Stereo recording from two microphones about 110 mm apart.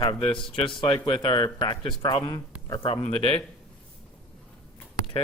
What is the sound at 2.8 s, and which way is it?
Speech, 65° left (ahead or behind).